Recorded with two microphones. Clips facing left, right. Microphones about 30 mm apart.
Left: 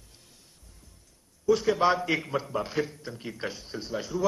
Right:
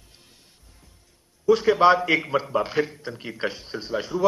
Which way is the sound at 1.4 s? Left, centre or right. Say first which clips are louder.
Right 6 dB; right.